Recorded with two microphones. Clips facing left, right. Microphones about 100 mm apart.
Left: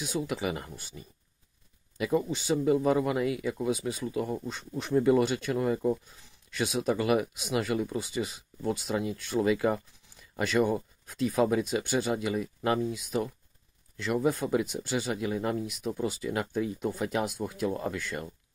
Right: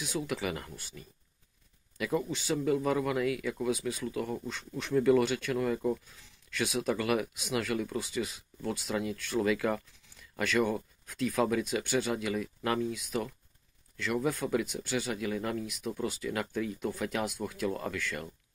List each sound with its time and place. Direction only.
0.3 s speech: 20° left (ahead or behind)